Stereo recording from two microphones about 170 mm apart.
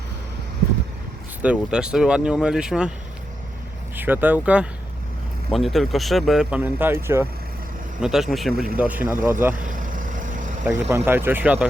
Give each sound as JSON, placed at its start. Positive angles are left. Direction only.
{"t": 1.4, "sound": "speech", "side_deg": -5}
{"t": 3.9, "sound": "speech", "side_deg": -10}
{"t": 8.0, "sound": "speech", "side_deg": 0}
{"t": 9.6, "sound": "vehicle", "side_deg": -50}
{"t": 10.7, "sound": "speech", "side_deg": -15}